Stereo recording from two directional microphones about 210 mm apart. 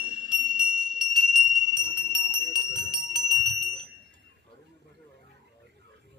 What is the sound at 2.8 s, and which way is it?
Bell, centre (ahead or behind).